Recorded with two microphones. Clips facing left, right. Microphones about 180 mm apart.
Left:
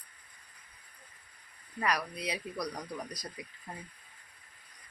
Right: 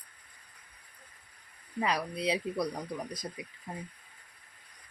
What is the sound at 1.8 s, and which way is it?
Speech, 25° right (ahead or behind).